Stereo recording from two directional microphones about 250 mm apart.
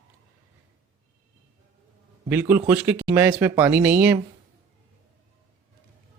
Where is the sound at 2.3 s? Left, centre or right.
Centre.